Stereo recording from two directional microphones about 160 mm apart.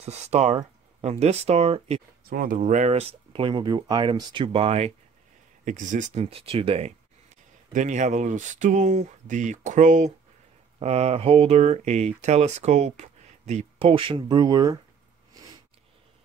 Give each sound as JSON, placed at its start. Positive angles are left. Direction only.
{"t": 0.0, "sound": "speech", "side_deg": -45}
{"t": 2.2, "sound": "speech", "side_deg": -60}
{"t": 5.7, "sound": "speech", "side_deg": -50}
{"t": 6.2, "sound": "speech", "side_deg": -35}
{"t": 7.7, "sound": "speech", "side_deg": -50}
{"t": 10.8, "sound": "speech", "side_deg": -40}